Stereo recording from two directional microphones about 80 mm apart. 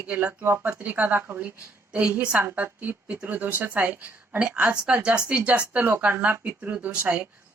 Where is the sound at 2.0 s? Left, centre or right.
Centre.